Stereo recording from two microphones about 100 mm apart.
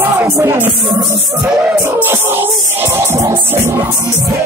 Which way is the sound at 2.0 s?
20° right (ahead or behind).